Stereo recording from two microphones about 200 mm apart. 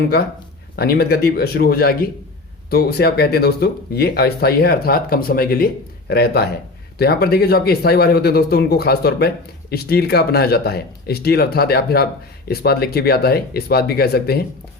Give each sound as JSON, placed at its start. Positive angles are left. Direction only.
{"t": 0.8, "sound": "speech", "side_deg": 50}